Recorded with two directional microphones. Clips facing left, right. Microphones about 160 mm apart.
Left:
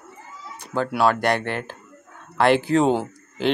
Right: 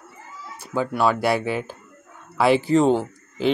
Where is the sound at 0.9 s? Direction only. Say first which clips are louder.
Left 1 dB; 5° right (ahead or behind).